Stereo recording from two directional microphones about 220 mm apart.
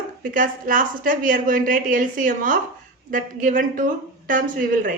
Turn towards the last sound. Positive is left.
turn(degrees=-40)  # may be behind; listen again after turning